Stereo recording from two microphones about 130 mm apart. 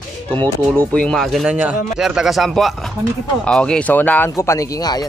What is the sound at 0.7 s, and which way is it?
Speech, 10° left (ahead or behind).